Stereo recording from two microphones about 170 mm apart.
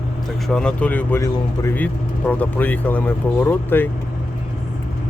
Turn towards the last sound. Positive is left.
turn(degrees=10)  # may be behind; listen again after turning